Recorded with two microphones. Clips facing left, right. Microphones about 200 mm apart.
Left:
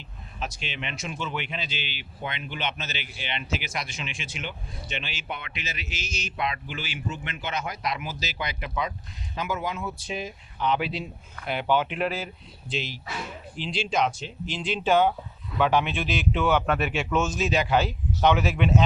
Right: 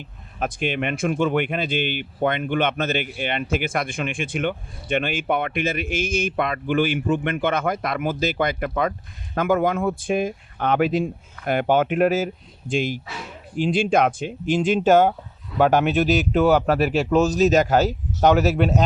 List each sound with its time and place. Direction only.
0.3 s speech: 55° right (ahead or behind)